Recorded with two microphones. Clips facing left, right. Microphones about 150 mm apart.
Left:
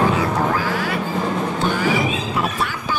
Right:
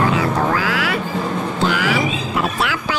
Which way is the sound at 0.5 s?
90° right.